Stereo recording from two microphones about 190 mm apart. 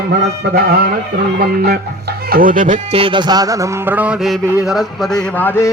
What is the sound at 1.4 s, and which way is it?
Speech, 55° right (ahead or behind).